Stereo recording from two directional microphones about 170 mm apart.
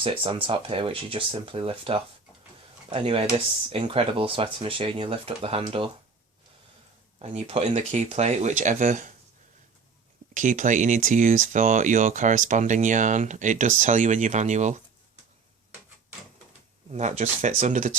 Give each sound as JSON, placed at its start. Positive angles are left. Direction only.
{"t": 0.0, "sound": "speech", "side_deg": -30}
{"t": 7.2, "sound": "speech", "side_deg": -35}
{"t": 10.3, "sound": "speech", "side_deg": -50}
{"t": 16.9, "sound": "speech", "side_deg": -40}